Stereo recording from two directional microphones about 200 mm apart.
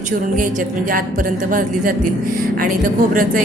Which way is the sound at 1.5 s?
40° right (ahead or behind).